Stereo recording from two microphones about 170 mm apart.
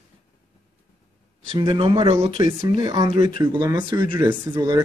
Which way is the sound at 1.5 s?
30° right (ahead or behind).